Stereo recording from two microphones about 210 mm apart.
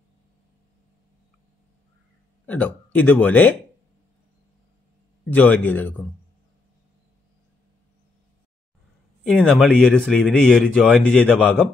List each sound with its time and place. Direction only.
2.4 s speech: 5° left (ahead or behind)
5.3 s speech: 5° left (ahead or behind)
9.2 s speech: centre (ahead or behind)